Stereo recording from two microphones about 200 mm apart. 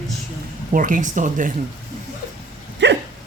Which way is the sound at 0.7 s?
40° right (ahead or behind).